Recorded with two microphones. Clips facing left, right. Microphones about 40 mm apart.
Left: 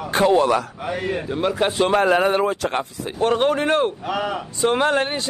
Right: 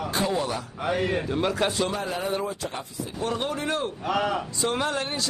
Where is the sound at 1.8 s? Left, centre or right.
Left.